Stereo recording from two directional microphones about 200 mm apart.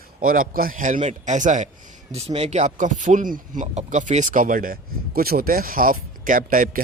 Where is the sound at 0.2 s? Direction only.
45° right (ahead or behind).